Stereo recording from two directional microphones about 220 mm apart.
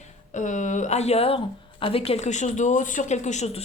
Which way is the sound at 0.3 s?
35° left (ahead or behind).